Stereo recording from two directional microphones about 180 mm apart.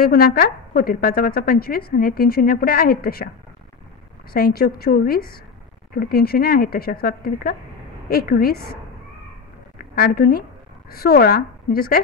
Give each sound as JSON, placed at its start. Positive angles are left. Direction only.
{"t": 0.0, "sound": "a woman's voice", "side_deg": 55}
{"t": 4.3, "sound": "a woman's voice", "side_deg": 60}
{"t": 9.9, "sound": "a woman's voice", "side_deg": 55}